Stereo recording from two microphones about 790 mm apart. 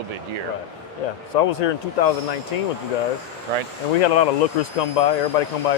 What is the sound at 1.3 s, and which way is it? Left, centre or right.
Speech, left.